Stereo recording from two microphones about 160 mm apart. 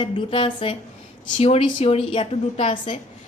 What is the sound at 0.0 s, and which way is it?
A woman's voice, 30° left (ahead or behind).